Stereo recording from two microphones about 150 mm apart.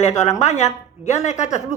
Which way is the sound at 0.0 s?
45° left (ahead or behind).